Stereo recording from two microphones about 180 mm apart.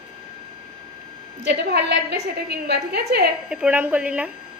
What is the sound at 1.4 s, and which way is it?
A woman's voice, 70° right (ahead or behind).